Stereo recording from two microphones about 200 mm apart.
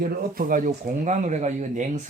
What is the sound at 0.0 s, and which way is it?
Speech, 45° right (ahead or behind).